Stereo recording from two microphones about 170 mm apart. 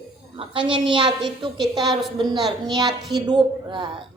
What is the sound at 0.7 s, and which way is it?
Speech, 30° right (ahead or behind).